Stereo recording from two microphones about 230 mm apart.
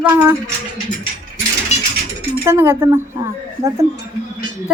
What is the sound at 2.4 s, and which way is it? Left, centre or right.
Speech, centre.